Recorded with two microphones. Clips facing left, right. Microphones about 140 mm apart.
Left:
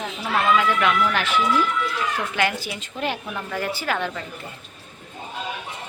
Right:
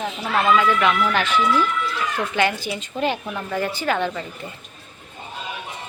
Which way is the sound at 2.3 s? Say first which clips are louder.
Right 3 dB; centre (ahead or behind).